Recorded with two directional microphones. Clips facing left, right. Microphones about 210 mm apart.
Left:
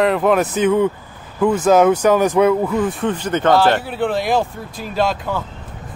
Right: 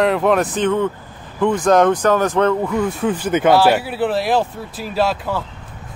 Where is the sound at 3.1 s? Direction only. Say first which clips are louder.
Right 2 dB; 10° right (ahead or behind).